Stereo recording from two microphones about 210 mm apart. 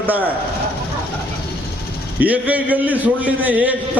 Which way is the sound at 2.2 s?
5° right (ahead or behind).